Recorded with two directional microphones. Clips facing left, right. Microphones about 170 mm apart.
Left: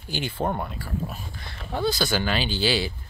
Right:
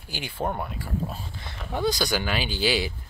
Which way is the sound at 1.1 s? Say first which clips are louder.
Right 1 dB; 25° right (ahead or behind).